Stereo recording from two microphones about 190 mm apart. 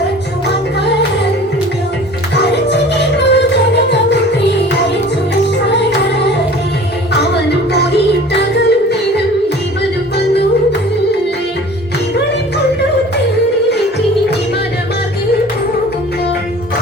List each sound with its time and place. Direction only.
2.3 s music: 65° left (ahead or behind)
7.7 s music: 60° left (ahead or behind)